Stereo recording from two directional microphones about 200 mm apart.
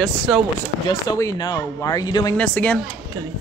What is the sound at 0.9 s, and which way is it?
Speech, 20° left (ahead or behind).